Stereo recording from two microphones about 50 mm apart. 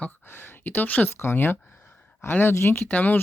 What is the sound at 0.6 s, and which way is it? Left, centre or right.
Speech, left.